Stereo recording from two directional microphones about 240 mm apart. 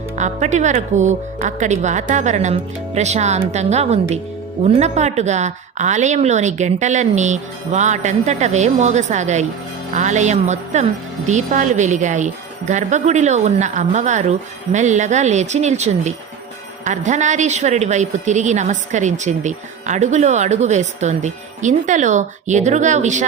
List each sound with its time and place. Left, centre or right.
0.2 s a woman's voice: right